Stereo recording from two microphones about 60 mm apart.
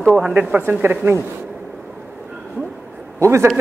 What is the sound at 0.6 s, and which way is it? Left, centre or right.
Speech, right.